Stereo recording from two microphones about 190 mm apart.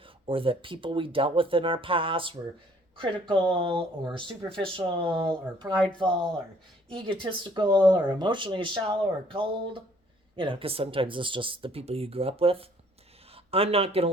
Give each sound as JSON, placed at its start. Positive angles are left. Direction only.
{"t": 0.3, "sound": "speech", "side_deg": -30}